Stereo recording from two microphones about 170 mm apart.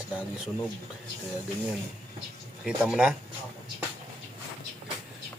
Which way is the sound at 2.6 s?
Centre (ahead or behind).